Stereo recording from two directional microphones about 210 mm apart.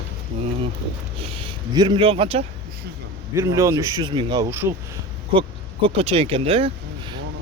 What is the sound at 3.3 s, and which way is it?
Speech, 15° right (ahead or behind).